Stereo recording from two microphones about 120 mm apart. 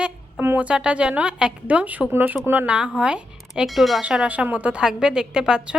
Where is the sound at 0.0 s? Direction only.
15° right (ahead or behind).